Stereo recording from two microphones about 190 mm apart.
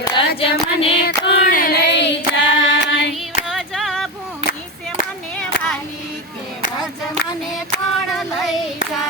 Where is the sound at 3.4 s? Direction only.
Centre (ahead or behind).